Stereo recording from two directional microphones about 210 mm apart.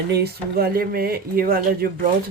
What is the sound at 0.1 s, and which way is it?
Speech, 45° right (ahead or behind).